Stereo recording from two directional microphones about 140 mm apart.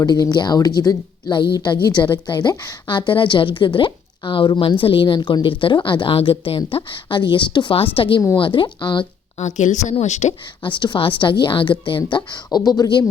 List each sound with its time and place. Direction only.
0.0 s a woman's voice: 25° left (ahead or behind)
9.4 s a woman's voice: 60° left (ahead or behind)
10.6 s a woman's voice: 35° left (ahead or behind)